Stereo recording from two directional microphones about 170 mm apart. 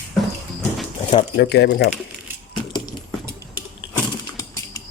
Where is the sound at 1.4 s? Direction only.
75° left (ahead or behind).